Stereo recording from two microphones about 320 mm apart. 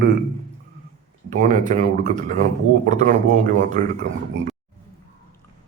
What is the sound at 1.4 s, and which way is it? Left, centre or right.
Speech, right.